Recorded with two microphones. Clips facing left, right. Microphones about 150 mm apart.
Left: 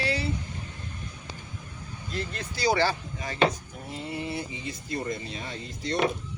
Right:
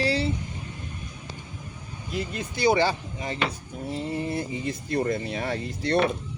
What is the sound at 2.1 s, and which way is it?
Speech, 15° right (ahead or behind).